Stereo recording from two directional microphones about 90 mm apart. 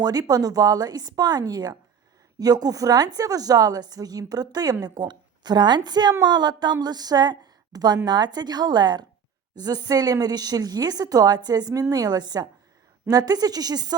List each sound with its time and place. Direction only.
0.0 s a woman's voice: 45° right (ahead or behind)